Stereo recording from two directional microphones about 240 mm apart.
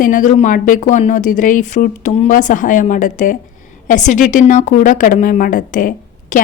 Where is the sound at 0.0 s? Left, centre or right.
Left.